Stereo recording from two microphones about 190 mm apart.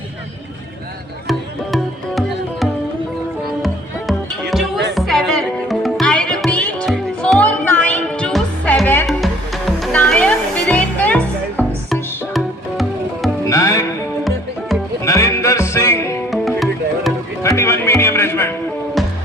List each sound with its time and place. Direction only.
1.3 s music: centre (ahead or behind)
13.5 s music: 15° left (ahead or behind)
15.0 s music: 15° left (ahead or behind)
16.3 s music: centre (ahead or behind)
17.4 s music: 15° left (ahead or behind)
19.0 s music: centre (ahead or behind)